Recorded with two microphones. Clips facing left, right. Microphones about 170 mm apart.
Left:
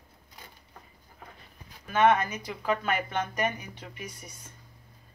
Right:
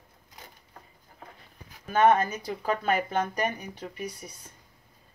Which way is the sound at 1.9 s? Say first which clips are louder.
Right 2 dB; 40° right (ahead or behind).